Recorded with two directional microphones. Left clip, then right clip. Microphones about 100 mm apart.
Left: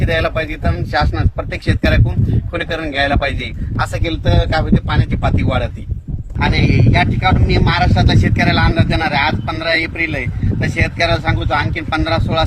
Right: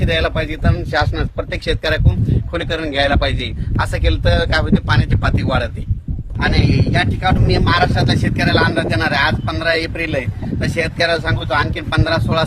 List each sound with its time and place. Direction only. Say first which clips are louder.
0.2 s a man's voice: left 1 dB; 55° right (ahead or behind)
4.1 s speech: right 2 dB; 30° right (ahead or behind)